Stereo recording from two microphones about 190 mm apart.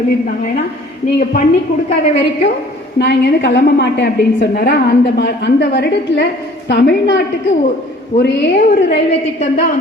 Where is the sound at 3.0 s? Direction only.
60° left (ahead or behind).